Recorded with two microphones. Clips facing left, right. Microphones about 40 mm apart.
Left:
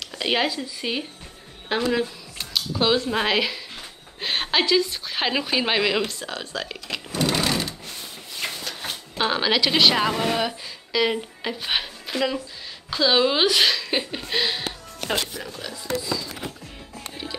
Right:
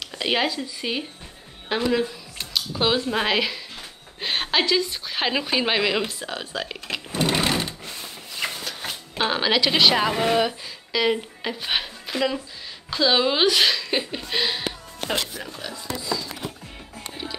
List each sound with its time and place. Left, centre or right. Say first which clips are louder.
0.0 s a woman's voice: even; centre
7.1 s sewing machine: right 1 dB; right
7.8 s a sound: right 1 dB; right
8.5 s a sound: left 2 dB; centre
9.2 s a woman's voice: even; centre
16.0 s a woman's voice: even; centre
17.1 s music: right 1 dB; centre